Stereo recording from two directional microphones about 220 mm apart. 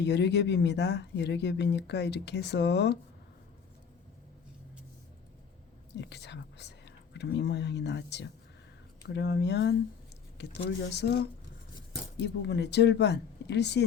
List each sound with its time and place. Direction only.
0.0 s speech: 50° left (ahead or behind)
5.9 s speech: 50° left (ahead or behind)